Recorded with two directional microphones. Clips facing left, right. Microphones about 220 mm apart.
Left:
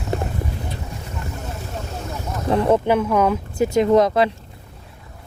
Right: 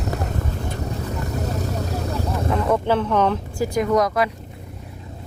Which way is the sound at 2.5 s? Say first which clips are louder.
Left 5 dB; 30° left (ahead or behind).